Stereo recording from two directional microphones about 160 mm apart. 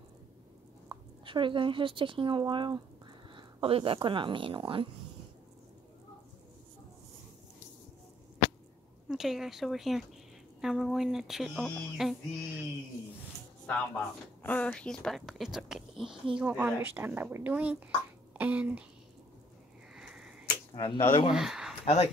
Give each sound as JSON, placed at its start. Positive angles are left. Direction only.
{"t": 0.8, "sound": "a woman's voice", "side_deg": -30}
{"t": 9.1, "sound": "speech", "side_deg": 0}
{"t": 13.7, "sound": "a woman's voice", "side_deg": 10}
{"t": 20.0, "sound": "a sound", "side_deg": -5}
{"t": 20.7, "sound": "speech", "side_deg": 30}
{"t": 21.3, "sound": "speech", "side_deg": -5}
{"t": 21.8, "sound": "speech", "side_deg": 40}